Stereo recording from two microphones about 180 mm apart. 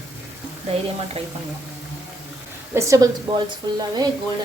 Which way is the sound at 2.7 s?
15° right (ahead or behind).